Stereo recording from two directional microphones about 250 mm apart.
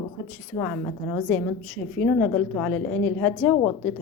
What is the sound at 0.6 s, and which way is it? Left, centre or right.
A woman's voice, centre.